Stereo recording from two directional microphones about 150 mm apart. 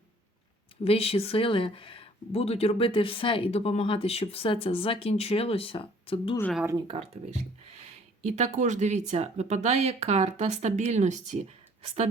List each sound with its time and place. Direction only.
0.9 s speech: 40° left (ahead or behind)
6.7 s speech: 30° right (ahead or behind)
7.8 s speech: 45° right (ahead or behind)